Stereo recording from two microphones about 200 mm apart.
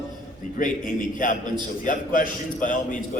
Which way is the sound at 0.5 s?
40° left (ahead or behind).